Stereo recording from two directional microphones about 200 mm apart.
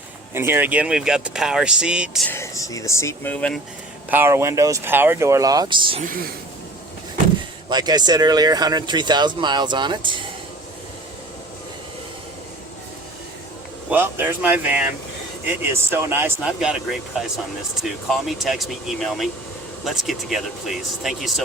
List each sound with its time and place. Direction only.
0.3 s speech: 10° right (ahead or behind)
2.3 s speech: 15° left (ahead or behind)
4.1 s speech: 10° right (ahead or behind)
6.0 s speech: 45° right (ahead or behind)
7.7 s speech: 20° right (ahead or behind)
13.9 s speech: 10° right (ahead or behind)
17.7 s speech: centre (ahead or behind)